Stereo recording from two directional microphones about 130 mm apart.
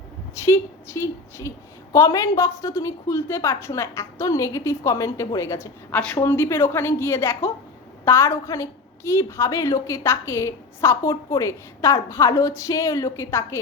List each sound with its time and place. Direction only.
0.4 s a woman's voice: 20° left (ahead or behind)
5.9 s a woman's voice: 10° left (ahead or behind)
6.1 s a woman's voice: 20° left (ahead or behind)